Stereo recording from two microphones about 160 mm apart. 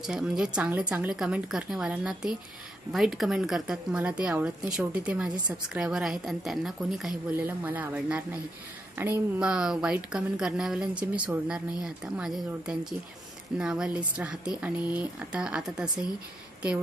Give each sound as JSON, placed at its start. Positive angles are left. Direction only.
{"t": 0.0, "sound": "a woman's voice", "side_deg": -5}